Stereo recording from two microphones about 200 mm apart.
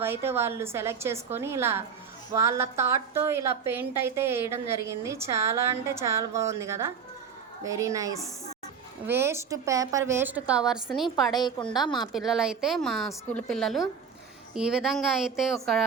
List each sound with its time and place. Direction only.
0.0 s a woman's voice: 10° right (ahead or behind)
11.3 s a woman's voice: 20° left (ahead or behind)
12.1 s a woman's voice: centre (ahead or behind)